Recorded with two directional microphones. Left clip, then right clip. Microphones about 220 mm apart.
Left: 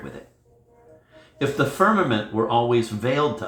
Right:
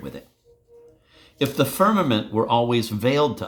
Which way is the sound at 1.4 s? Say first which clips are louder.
Even; 55° right (ahead or behind).